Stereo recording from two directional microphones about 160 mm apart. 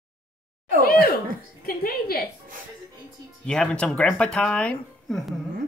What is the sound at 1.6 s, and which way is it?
Speech, 70° left (ahead or behind).